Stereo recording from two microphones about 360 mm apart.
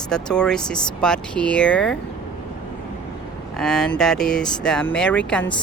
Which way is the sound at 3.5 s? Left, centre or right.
Centre.